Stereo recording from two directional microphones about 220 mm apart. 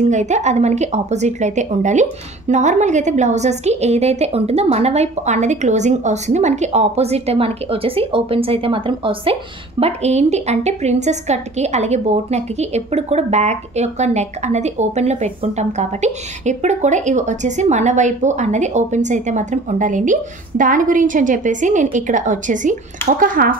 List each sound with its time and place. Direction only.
0.0 s a woman's voice: 30° right (ahead or behind)